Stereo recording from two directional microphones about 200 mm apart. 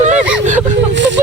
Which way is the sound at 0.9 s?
65° right (ahead or behind).